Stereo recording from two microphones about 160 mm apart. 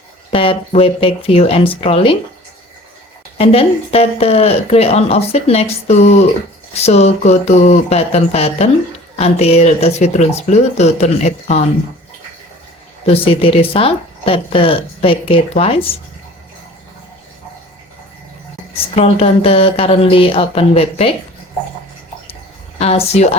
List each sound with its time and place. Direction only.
0.3 s speech: 35° left (ahead or behind)
3.3 s speech: 40° left (ahead or behind)
13.1 s speech: 35° left (ahead or behind)
18.7 s speech: 40° left (ahead or behind)
22.8 s speech: 40° left (ahead or behind)